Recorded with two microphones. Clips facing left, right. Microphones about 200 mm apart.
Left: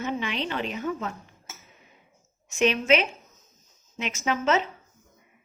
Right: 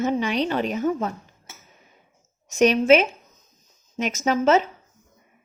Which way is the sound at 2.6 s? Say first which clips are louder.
Right 6 dB; 40° right (ahead or behind).